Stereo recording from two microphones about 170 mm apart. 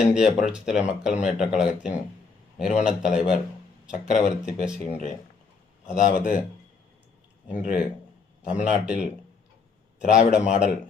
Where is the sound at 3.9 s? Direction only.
45° left (ahead or behind).